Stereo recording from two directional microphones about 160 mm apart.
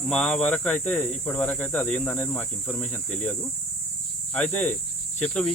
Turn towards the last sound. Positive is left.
turn(degrees=5)  # may be behind; listen again after turning